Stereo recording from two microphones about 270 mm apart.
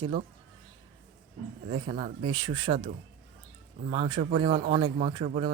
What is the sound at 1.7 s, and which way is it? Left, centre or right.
Speech, centre.